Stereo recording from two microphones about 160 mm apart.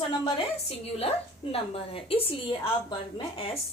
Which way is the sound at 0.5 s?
40° left (ahead or behind).